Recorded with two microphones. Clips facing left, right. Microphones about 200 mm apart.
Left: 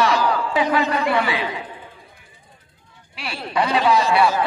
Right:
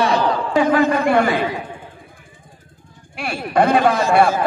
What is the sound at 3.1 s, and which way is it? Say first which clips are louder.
A man's voice: right 6 dB; 50° right (ahead or behind).